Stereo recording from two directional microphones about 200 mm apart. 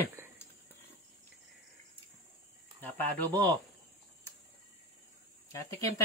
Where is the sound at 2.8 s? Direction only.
10° left (ahead or behind).